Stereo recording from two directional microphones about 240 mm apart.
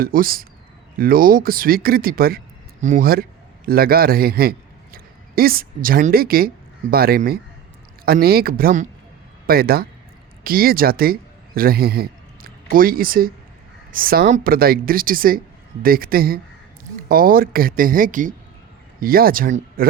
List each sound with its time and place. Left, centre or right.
0.0 s a woman's voice: right